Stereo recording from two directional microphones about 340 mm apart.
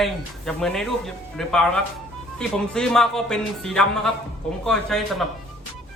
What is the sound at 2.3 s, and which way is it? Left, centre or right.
A man's voice, centre.